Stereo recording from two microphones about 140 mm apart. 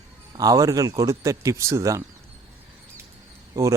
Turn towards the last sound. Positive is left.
turn(degrees=-20)  # may be behind; listen again after turning